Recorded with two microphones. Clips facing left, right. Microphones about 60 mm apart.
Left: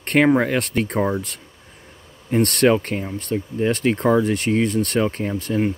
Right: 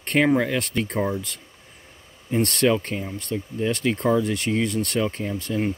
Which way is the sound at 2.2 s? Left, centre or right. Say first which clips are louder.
Left 4 dB; left.